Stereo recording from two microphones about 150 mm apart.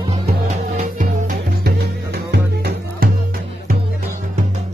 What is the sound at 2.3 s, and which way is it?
Music, 90° right.